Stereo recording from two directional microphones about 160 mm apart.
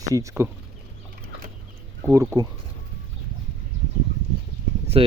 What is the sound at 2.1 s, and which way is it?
Speech, 20° right (ahead or behind).